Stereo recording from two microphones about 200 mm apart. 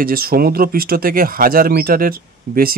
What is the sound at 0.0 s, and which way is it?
Speech, 50° right (ahead or behind).